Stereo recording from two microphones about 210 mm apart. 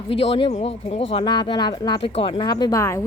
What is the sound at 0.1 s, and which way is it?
Speech, 30° left (ahead or behind).